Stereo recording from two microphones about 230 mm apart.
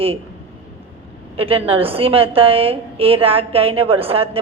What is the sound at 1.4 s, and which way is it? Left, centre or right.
A woman's voice, right.